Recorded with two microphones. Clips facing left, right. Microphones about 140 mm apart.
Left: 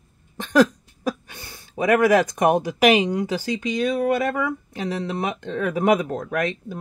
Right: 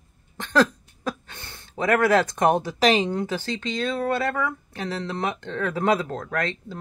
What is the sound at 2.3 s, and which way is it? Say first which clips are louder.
Speech: left 2 dB; 15° left (ahead or behind).